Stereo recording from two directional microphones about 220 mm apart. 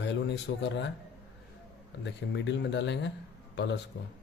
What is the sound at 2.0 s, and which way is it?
Speech, 55° left (ahead or behind).